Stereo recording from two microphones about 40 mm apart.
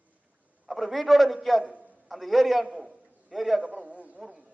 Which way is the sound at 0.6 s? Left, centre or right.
Centre.